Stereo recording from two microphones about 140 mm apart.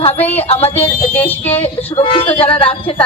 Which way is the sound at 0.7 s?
15° left (ahead or behind).